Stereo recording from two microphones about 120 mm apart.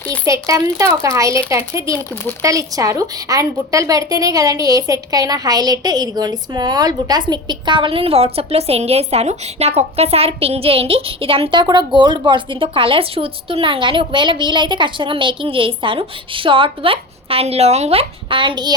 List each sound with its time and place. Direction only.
0.3 s speech: 25° right (ahead or behind)